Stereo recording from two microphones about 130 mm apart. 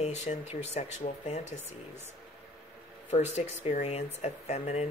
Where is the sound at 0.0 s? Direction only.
60° left (ahead or behind).